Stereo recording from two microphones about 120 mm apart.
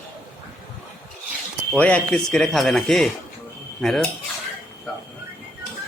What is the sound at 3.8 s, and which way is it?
Cutlery, 5° left (ahead or behind).